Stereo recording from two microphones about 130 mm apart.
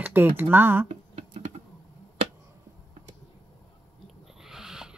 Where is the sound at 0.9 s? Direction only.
50° right (ahead or behind).